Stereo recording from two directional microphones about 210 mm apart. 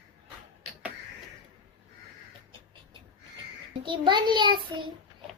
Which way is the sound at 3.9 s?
20° right (ahead or behind).